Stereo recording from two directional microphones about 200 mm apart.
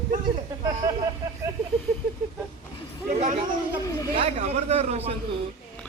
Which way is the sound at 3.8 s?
15° left (ahead or behind).